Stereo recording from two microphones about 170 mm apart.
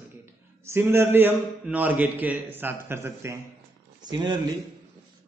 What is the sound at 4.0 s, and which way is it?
Speech, 25° right (ahead or behind).